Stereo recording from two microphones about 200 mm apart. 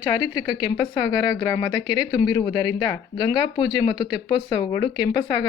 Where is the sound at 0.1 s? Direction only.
20° left (ahead or behind).